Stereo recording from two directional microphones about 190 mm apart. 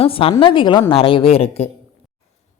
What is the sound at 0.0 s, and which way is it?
A woman's voice, 30° left (ahead or behind).